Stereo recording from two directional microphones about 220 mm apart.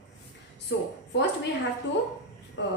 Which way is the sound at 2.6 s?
60° left (ahead or behind).